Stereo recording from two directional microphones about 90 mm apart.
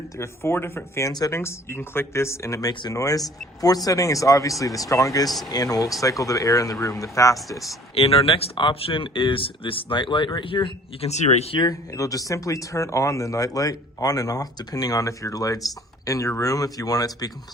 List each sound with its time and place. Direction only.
0.2 s speech: 30° left (ahead or behind)
7.9 s speech: 90° left
11.9 s speech: 40° left (ahead or behind)